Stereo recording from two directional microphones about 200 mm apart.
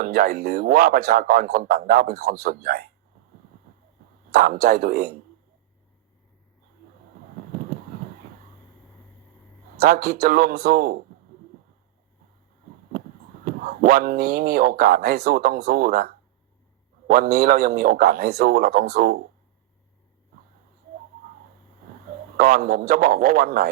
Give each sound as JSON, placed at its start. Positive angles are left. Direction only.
{"t": 0.0, "sound": "a man's voice", "side_deg": -45}
{"t": 4.3, "sound": "a man's voice", "side_deg": -50}
{"t": 9.8, "sound": "a man's voice", "side_deg": -50}
{"t": 13.4, "sound": "a man's voice", "side_deg": -45}
{"t": 22.4, "sound": "a man's voice", "side_deg": -50}